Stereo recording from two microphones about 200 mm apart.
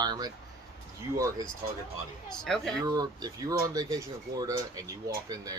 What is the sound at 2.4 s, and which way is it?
Speech, centre (ahead or behind).